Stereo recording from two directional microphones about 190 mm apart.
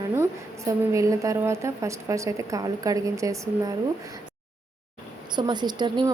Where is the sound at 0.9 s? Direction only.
15° right (ahead or behind).